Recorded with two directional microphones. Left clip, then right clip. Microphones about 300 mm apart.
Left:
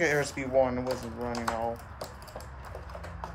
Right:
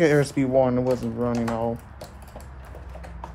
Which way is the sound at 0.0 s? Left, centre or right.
Right.